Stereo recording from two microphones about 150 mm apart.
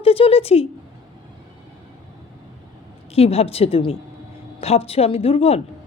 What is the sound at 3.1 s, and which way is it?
A woman's voice, 40° left (ahead or behind).